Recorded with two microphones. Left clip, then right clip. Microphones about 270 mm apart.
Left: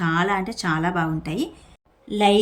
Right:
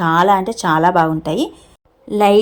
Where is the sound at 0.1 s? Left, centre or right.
Right.